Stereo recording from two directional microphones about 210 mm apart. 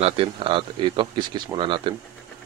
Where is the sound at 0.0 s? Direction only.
25° right (ahead or behind).